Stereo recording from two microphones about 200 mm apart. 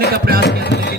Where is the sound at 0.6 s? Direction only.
55° left (ahead or behind).